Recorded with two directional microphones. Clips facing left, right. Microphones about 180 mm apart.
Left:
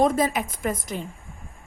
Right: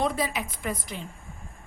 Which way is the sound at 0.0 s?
45° left (ahead or behind).